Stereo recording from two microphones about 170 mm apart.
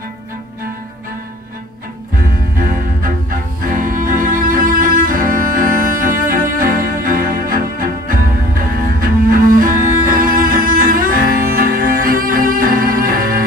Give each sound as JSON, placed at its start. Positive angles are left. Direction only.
{"t": 2.2, "sound": "cello", "side_deg": -55}
{"t": 10.2, "sound": "music", "side_deg": -55}